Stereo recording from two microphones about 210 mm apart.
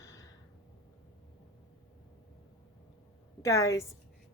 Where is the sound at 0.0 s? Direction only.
15° left (ahead or behind).